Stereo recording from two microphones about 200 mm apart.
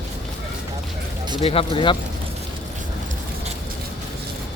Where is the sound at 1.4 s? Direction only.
30° left (ahead or behind).